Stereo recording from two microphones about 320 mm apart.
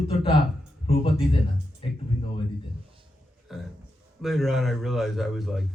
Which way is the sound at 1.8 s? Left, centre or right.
Centre.